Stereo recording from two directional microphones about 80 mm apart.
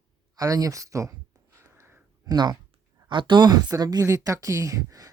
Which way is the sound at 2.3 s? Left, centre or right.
Right.